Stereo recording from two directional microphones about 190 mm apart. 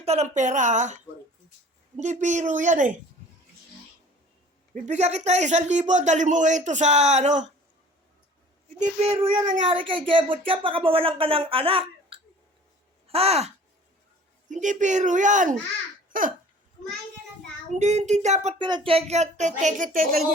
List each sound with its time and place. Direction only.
0.0 s a man's voice: 35° right (ahead or behind)
2.0 s a man's voice: 40° right (ahead or behind)
4.7 s a man's voice: 35° right (ahead or behind)
8.8 s a man's voice: 30° right (ahead or behind)
9.3 s speech: 45° right (ahead or behind)
9.6 s speech: 25° right (ahead or behind)
14.5 s a man's voice: 40° right (ahead or behind)
17.7 s a man's voice: 35° right (ahead or behind)
18.6 s a man's voice: 25° right (ahead or behind); by 20.2 s 50° right (ahead or behind)